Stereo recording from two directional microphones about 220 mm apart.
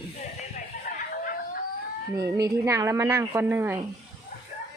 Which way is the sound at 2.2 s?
15° right (ahead or behind).